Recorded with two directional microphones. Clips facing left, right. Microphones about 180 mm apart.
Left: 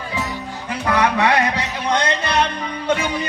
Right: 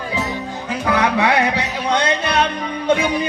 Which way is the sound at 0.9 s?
10° right (ahead or behind).